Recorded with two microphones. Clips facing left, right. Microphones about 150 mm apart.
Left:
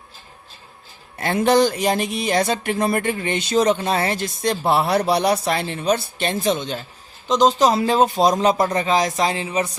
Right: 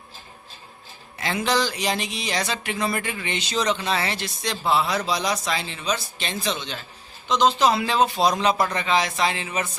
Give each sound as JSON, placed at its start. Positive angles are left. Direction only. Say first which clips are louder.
{"t": 1.2, "sound": "speech", "louder": "left 7 dB", "side_deg": 55}